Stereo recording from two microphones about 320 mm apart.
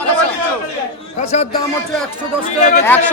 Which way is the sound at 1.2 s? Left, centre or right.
Left.